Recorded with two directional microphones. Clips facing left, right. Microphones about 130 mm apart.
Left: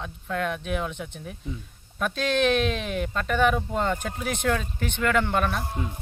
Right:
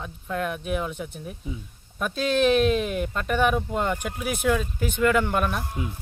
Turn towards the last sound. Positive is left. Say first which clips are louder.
# even
turn(degrees=-10)  # may be behind; listen again after turning